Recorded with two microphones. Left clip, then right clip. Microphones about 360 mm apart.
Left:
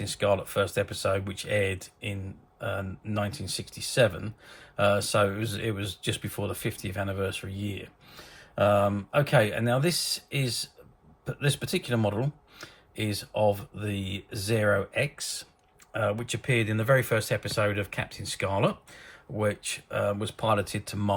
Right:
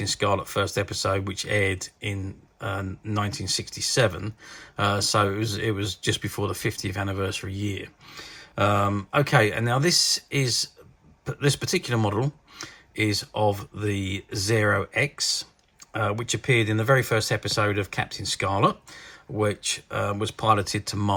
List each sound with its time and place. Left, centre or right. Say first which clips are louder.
0.0 s speech: right 2 dB; centre
12.5 s a sound: right 9 dB; centre
13.5 s speech: right 2 dB; centre